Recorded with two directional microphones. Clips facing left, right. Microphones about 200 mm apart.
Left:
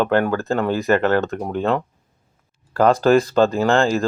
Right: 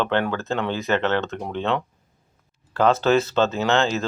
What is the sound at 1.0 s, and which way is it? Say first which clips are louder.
Speech: left 5 dB; 40° left (ahead or behind).